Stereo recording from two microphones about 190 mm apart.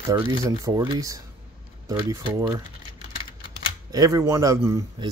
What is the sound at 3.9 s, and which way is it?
Speech, 20° right (ahead or behind).